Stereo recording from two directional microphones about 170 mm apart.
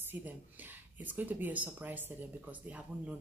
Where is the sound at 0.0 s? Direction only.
10° right (ahead or behind).